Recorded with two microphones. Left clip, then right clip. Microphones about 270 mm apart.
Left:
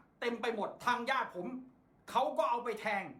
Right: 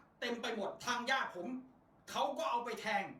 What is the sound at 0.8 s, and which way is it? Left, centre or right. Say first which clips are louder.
Speech: left 5 dB; left.